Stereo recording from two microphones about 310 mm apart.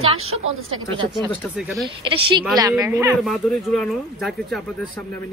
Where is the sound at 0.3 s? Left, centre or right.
Right.